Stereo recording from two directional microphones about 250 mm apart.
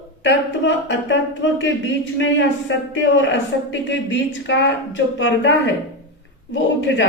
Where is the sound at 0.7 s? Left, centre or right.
Left.